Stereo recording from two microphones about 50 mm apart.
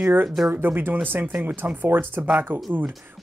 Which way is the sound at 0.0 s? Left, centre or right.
Right.